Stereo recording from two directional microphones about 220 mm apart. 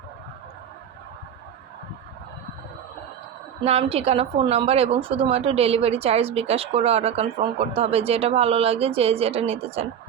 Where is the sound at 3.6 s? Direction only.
25° right (ahead or behind).